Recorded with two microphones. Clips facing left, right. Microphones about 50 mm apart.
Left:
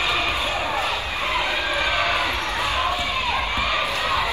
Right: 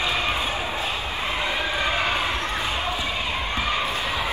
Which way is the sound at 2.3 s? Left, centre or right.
Left.